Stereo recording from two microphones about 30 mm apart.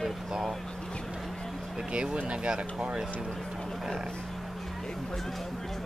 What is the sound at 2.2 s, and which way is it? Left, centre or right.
Speech, right.